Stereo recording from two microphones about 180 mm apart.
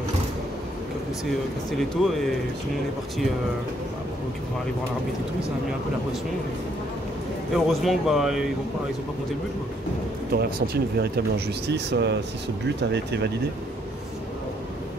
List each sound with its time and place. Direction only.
1.7 s a man's voice: centre (ahead or behind)
7.5 s a man's voice: centre (ahead or behind)
10.3 s speech: 60° right (ahead or behind)